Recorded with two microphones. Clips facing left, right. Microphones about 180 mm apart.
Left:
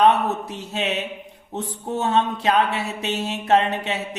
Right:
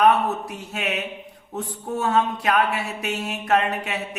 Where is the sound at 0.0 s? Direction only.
25° left (ahead or behind).